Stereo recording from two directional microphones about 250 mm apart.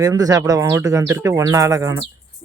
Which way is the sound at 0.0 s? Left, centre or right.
Centre.